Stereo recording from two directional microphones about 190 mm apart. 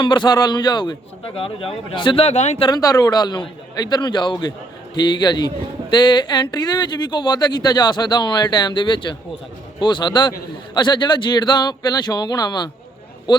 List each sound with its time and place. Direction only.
0.0 s speech: 25° left (ahead or behind)
2.6 s speech: 20° left (ahead or behind)